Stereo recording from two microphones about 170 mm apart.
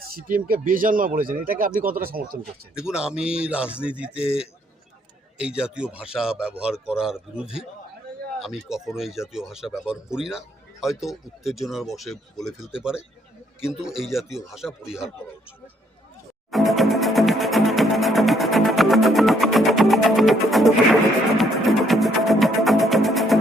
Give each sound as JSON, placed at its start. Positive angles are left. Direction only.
{"t": 0.1, "sound": "speech", "side_deg": -55}
{"t": 2.7, "sound": "music", "side_deg": -5}
{"t": 5.4, "sound": "music", "side_deg": -5}
{"t": 16.5, "sound": "music", "side_deg": 0}